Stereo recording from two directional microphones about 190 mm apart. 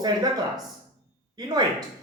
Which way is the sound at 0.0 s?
20° right (ahead or behind).